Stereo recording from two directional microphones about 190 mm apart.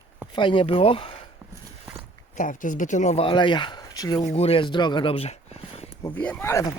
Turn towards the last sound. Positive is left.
turn(degrees=15)  # may be behind; listen again after turning